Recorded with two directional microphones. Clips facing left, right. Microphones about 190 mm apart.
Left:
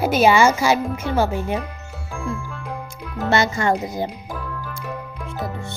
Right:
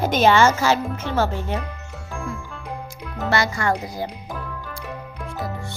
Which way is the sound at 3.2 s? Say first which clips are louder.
Left 3 dB; 25° left (ahead or behind).